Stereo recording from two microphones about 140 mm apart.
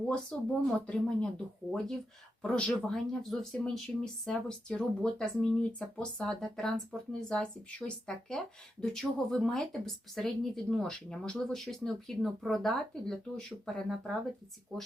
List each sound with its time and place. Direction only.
0.0 s speech: 5° left (ahead or behind)
2.4 s speech: 5° left (ahead or behind)